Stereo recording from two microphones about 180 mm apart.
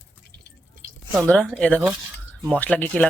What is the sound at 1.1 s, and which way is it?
Speech, 5° left (ahead or behind).